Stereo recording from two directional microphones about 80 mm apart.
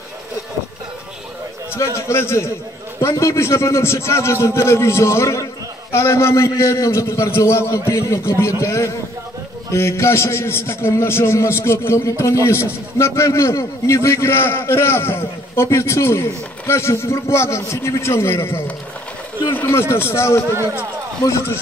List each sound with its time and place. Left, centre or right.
2.0 s a man's voice: left